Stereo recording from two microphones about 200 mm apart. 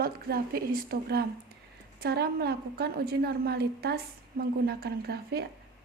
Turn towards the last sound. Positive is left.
turn(degrees=-50)  # may be behind; listen again after turning